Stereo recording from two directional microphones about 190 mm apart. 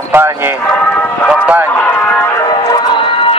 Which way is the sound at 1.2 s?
5° right (ahead or behind).